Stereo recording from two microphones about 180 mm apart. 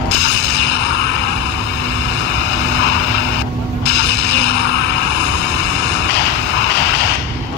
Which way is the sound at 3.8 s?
70° left (ahead or behind).